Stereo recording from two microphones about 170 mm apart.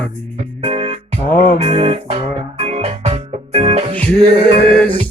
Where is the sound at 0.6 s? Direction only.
35° right (ahead or behind).